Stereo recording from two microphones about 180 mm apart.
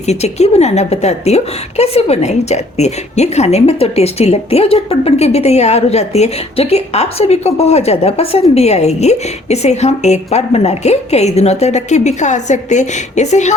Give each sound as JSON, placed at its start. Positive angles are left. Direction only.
{"t": 0.0, "sound": "a woman's voice", "side_deg": 35}